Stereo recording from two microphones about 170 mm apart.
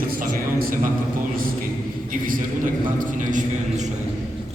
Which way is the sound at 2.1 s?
55° right (ahead or behind).